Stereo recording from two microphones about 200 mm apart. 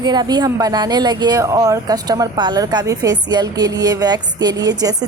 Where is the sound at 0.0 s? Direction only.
20° right (ahead or behind).